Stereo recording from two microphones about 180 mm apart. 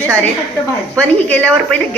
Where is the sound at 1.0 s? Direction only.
5° left (ahead or behind).